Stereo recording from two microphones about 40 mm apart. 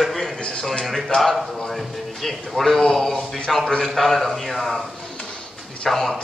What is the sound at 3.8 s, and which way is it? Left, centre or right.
Speech, centre.